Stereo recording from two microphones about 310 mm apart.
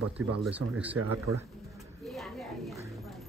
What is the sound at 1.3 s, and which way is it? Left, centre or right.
Speech, right.